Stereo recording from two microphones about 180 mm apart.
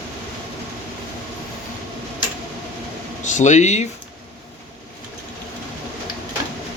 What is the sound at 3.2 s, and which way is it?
Speech, 40° left (ahead or behind).